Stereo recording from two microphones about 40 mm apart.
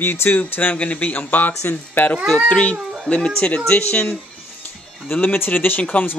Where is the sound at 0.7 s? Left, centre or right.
Left.